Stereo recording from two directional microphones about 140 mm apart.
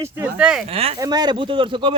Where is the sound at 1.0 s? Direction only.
30° right (ahead or behind).